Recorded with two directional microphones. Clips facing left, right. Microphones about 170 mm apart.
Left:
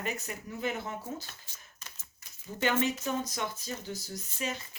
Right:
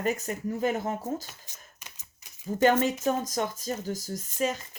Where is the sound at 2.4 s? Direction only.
40° right (ahead or behind).